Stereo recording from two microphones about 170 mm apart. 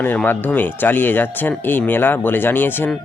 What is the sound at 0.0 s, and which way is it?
Speech, 10° left (ahead or behind).